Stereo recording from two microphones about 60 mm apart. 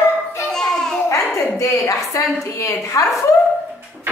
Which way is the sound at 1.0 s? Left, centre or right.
Left.